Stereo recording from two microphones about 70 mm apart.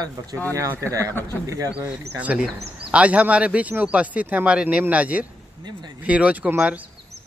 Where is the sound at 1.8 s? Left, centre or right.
Centre.